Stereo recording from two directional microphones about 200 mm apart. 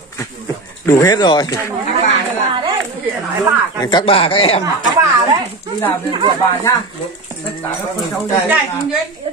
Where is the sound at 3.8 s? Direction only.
25° left (ahead or behind).